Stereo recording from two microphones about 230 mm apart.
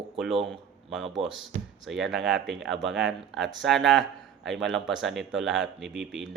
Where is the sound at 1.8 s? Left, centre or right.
Centre.